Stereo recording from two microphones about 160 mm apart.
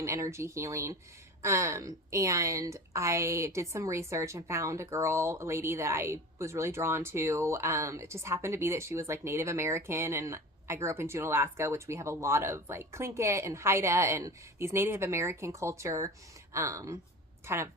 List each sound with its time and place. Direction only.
0.0 s a woman's voice: 20° right (ahead or behind)